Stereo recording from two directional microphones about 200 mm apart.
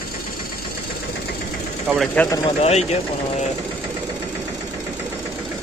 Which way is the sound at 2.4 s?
30° left (ahead or behind).